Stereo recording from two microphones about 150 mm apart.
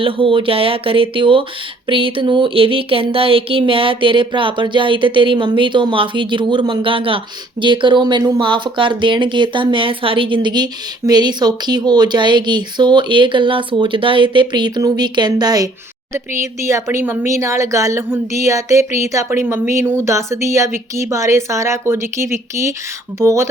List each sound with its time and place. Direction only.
0.0 s speech: 35° right (ahead or behind); by 23.5 s 20° right (ahead or behind)